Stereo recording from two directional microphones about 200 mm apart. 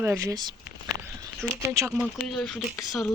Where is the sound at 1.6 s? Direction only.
15° right (ahead or behind).